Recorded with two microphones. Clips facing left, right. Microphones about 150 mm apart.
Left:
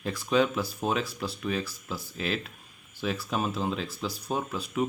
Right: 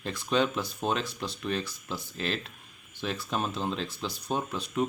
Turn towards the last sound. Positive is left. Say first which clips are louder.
# even
turn(degrees=5)  # may be behind; listen again after turning